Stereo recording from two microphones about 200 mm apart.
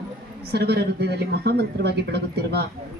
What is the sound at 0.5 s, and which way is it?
A man's voice, 55° right (ahead or behind).